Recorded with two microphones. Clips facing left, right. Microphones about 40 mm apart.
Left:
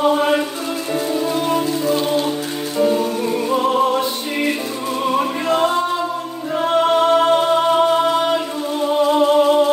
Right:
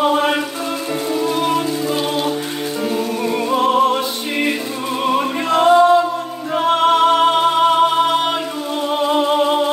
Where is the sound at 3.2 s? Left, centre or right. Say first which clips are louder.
Right 1 dB; right.